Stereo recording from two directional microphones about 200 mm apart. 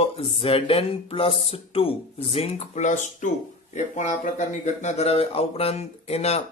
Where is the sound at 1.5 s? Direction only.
30° left (ahead or behind).